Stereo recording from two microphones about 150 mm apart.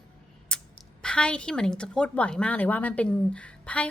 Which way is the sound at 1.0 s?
5° left (ahead or behind).